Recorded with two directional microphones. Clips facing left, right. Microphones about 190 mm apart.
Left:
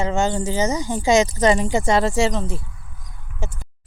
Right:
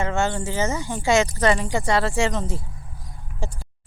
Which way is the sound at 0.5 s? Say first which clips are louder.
Left 3 dB; 15° left (ahead or behind).